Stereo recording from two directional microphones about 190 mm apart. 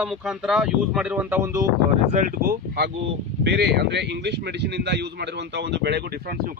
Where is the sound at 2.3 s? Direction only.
50° right (ahead or behind).